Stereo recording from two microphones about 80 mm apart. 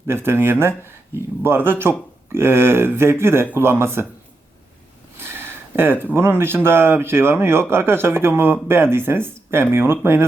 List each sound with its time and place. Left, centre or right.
0.1 s speech: right
5.2 s a sound: right
6.1 s speech: right